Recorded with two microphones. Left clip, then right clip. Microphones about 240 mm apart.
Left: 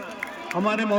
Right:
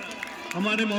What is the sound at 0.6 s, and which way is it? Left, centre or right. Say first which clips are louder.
Speech: left 2 dB; centre.